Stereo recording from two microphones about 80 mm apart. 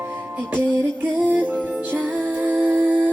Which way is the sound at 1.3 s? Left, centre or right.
Right.